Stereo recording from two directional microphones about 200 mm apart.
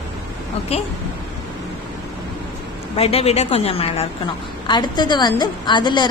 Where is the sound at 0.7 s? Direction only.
30° left (ahead or behind).